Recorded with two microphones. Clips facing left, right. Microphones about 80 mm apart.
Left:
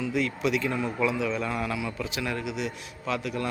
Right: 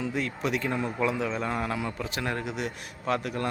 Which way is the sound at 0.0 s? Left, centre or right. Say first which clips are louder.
Left 3 dB; right.